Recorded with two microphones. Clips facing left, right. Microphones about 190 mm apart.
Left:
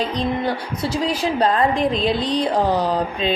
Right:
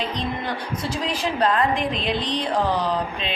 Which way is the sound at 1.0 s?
35° left (ahead or behind).